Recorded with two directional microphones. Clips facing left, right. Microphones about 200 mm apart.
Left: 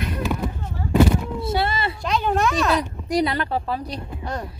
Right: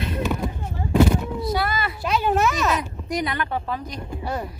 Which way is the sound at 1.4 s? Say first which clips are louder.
Left 1 dB; 25° left (ahead or behind).